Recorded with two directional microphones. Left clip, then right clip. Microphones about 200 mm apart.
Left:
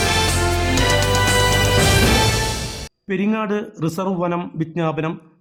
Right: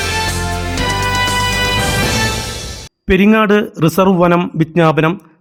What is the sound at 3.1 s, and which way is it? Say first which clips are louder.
A man's voice: right 11 dB; 35° right (ahead or behind).